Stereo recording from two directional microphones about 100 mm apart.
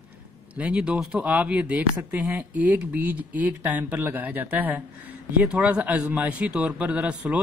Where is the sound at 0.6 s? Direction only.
10° right (ahead or behind).